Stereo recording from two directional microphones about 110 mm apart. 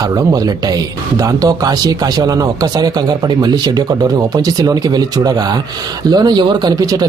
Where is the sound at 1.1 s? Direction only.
35° right (ahead or behind).